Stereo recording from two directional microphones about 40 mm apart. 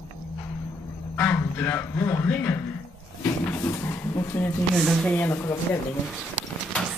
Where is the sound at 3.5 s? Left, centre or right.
Left.